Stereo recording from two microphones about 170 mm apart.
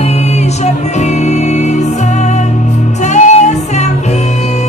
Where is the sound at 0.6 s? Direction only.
45° left (ahead or behind).